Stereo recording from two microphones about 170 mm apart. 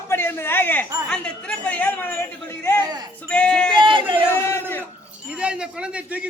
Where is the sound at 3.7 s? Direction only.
30° right (ahead or behind).